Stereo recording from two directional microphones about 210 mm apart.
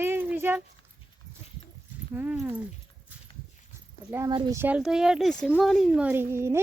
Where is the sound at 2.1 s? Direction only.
10° right (ahead or behind).